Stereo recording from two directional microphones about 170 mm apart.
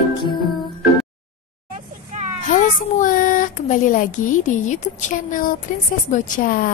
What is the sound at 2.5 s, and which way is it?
A child's voice, 50° left (ahead or behind).